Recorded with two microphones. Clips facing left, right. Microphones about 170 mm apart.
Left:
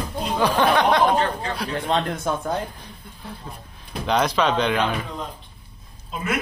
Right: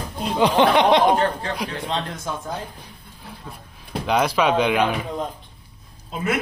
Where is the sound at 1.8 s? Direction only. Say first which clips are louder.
Left 4 dB; 55° left (ahead or behind).